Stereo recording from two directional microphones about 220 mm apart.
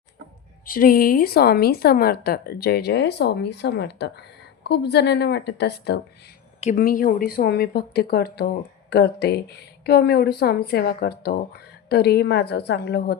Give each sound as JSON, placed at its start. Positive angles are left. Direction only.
{"t": 0.6, "sound": "speech", "side_deg": 40}